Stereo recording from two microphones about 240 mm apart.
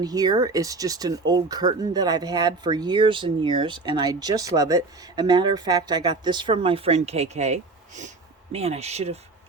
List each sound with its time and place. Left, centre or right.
0.0 s speech: centre